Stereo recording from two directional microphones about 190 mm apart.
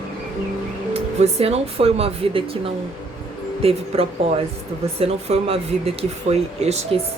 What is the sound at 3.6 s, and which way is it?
Speech, 30° right (ahead or behind).